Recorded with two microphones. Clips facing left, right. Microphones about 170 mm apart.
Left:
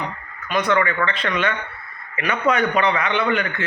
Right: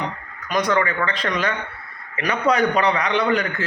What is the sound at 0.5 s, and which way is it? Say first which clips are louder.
A man's voice: even; 35° right (ahead or behind).